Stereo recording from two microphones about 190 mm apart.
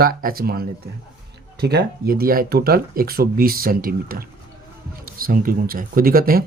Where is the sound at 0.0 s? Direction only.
50° right (ahead or behind).